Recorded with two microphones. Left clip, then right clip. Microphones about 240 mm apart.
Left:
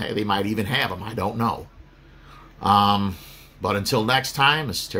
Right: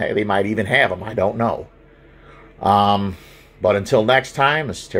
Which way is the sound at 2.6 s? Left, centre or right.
Left.